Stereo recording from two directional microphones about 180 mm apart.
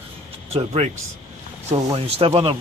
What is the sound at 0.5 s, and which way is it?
Speech, 35° right (ahead or behind).